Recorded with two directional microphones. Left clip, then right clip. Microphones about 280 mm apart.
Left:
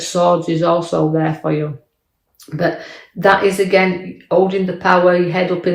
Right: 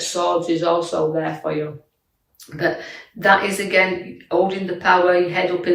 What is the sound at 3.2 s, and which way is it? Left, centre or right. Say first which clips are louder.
Speech: left 4 dB; centre.